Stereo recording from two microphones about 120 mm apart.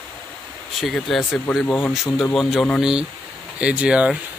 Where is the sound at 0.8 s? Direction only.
Centre (ahead or behind).